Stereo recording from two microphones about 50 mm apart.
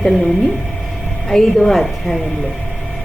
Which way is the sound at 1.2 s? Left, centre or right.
Centre.